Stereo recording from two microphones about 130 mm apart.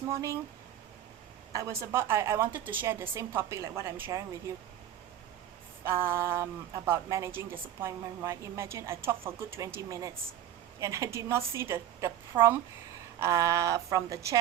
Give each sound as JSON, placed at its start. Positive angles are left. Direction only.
{"t": 0.1, "sound": "a woman's voice", "side_deg": -25}
{"t": 1.5, "sound": "a woman's voice", "side_deg": -20}
{"t": 5.8, "sound": "a woman's voice", "side_deg": -20}